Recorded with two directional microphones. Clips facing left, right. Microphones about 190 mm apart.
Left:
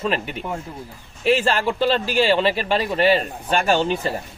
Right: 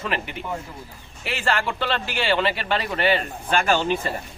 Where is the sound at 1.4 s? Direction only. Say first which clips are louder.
Left 5 dB; 30° left (ahead or behind).